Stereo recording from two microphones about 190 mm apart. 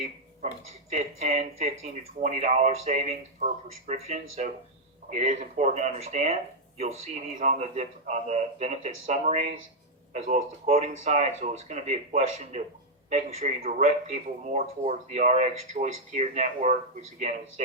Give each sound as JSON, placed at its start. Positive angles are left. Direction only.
{"t": 0.0, "sound": "speech", "side_deg": -35}